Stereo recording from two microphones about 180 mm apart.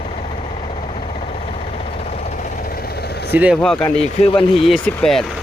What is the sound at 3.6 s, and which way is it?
Speech, 5° left (ahead or behind).